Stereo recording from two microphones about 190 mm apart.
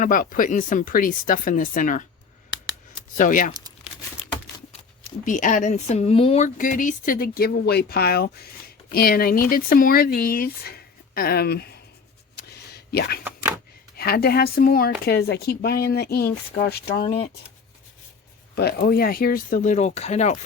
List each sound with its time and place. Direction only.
0.0 s speech: 45° left (ahead or behind)
3.2 s speech: 45° left (ahead or behind)
5.2 s speech: 40° left (ahead or behind)
12.4 s a sound: 55° left (ahead or behind)
13.9 s speech: 55° left (ahead or behind)
18.5 s speech: 55° left (ahead or behind); by 20.4 s 35° left (ahead or behind)